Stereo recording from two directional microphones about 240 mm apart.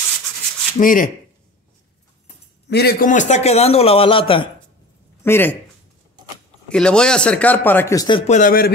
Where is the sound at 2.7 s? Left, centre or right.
Left.